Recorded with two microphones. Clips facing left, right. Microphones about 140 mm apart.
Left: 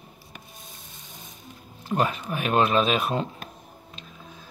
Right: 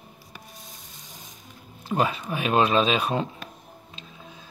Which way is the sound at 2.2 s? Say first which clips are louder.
Right 1 dB; 10° right (ahead or behind).